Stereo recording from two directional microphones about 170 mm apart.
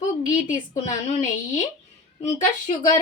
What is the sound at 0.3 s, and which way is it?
Speech, 45° left (ahead or behind).